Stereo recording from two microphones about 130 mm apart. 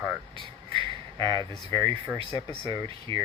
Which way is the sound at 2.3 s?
30° left (ahead or behind).